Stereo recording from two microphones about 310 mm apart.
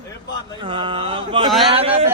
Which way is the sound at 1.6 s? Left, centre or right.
Centre.